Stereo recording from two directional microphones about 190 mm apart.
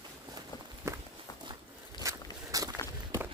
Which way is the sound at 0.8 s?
15° right (ahead or behind).